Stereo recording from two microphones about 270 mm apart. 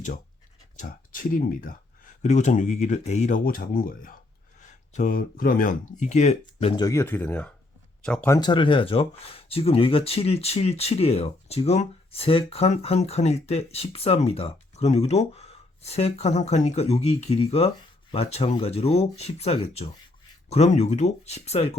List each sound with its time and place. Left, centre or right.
0.8 s speech: left